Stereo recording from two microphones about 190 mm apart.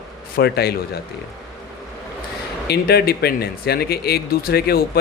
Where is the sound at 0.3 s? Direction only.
55° left (ahead or behind).